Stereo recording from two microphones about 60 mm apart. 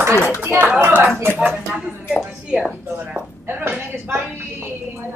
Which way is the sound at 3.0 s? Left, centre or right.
Right.